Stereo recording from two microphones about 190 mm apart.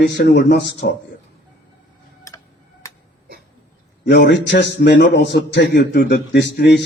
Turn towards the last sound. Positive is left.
turn(degrees=65)  # may be behind; listen again after turning